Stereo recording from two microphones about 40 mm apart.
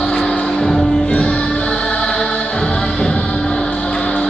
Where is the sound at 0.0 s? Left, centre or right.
Centre.